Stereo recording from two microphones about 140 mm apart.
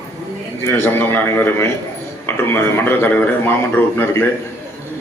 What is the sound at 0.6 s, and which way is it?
A man's voice, 15° left (ahead or behind).